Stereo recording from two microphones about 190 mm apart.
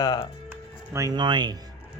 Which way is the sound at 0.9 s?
20° right (ahead or behind).